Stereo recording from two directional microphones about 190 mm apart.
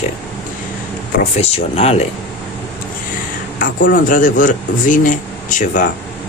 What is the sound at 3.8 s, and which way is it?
Speech, 45° left (ahead or behind).